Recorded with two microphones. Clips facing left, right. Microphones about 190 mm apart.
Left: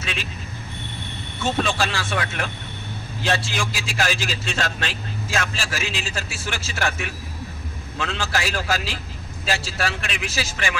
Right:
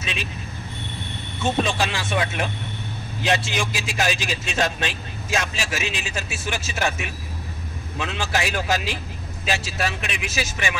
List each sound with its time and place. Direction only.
0.0 s vehicle: 20° right (ahead or behind)
1.4 s a man's voice: 20° right (ahead or behind)